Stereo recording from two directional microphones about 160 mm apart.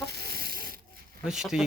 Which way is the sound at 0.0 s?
85° right.